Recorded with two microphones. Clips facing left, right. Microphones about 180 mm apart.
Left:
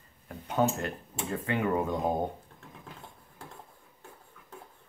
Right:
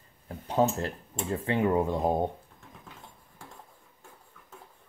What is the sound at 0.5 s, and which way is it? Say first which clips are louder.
Speech: right 2 dB; 30° right (ahead or behind).